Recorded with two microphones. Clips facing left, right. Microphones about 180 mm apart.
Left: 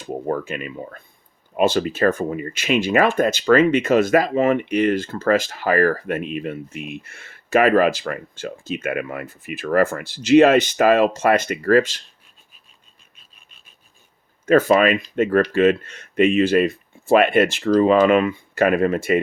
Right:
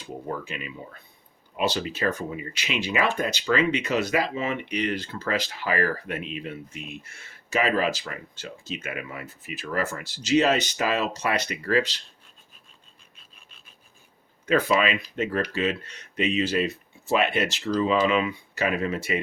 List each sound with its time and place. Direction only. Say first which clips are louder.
0.0 s speech: left 8 dB; 50° left (ahead or behind)
14.4 s speech: left 7 dB; 45° left (ahead or behind)